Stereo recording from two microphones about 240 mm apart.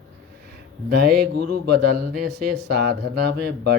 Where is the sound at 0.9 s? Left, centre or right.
Right.